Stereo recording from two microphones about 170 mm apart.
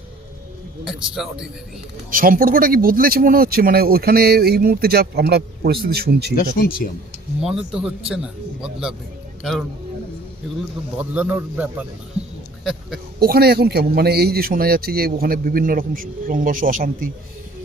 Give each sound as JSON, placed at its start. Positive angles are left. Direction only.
{"t": 0.9, "sound": "speech", "side_deg": -5}
{"t": 2.0, "sound": "speech", "side_deg": -55}
{"t": 7.4, "sound": "speech", "side_deg": -5}
{"t": 11.1, "sound": "speech", "side_deg": -10}
{"t": 13.1, "sound": "speech", "side_deg": -65}